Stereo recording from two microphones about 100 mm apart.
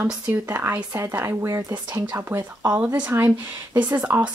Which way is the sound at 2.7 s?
15° right (ahead or behind).